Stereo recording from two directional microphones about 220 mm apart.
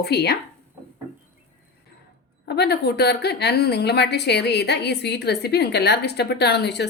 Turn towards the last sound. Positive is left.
turn(degrees=50)  # may be behind; listen again after turning